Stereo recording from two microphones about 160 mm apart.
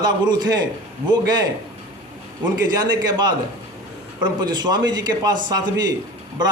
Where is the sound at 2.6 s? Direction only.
25° right (ahead or behind).